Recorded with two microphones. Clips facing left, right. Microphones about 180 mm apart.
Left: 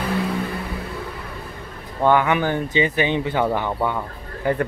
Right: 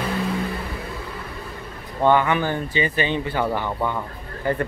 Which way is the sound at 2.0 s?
10° left (ahead or behind).